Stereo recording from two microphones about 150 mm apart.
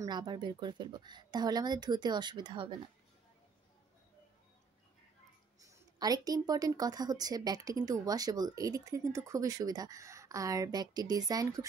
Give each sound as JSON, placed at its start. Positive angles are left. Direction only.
{"t": 0.0, "sound": "a woman's voice", "side_deg": -30}
{"t": 5.6, "sound": "a woman's voice", "side_deg": -25}